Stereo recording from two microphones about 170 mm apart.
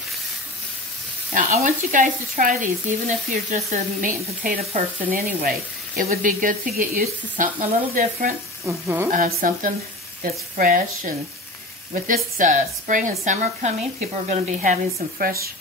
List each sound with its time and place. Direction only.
1.3 s speech: 50° right (ahead or behind)
8.6 s speech: 15° right (ahead or behind)
9.1 s speech: 55° right (ahead or behind)